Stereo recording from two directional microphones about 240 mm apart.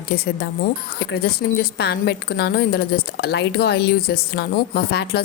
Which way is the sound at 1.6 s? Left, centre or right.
Left.